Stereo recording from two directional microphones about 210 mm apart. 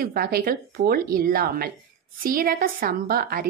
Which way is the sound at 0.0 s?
45° right (ahead or behind).